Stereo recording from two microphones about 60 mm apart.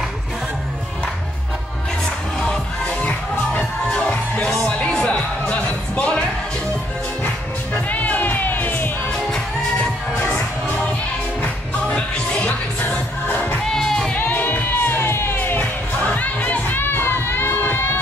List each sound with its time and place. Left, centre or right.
2.0 s music: centre
7.7 s music: left
9.1 s music: centre
11.9 s music: centre
13.7 s music: centre
14.1 s music: left
16.0 s music: left